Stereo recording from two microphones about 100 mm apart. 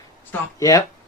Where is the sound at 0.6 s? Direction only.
35° left (ahead or behind).